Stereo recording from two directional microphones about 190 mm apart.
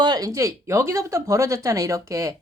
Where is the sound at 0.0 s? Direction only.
20° right (ahead or behind).